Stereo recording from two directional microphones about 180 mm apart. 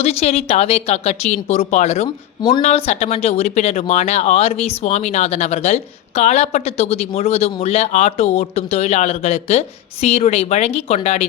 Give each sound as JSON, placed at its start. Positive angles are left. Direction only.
{"t": 0.0, "sound": "speech", "side_deg": 35}